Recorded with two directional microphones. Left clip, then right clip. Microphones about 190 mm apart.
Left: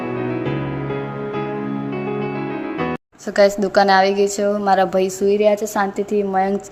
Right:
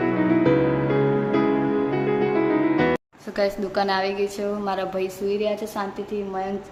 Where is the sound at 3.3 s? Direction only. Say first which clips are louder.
Left 9 dB; 40° left (ahead or behind).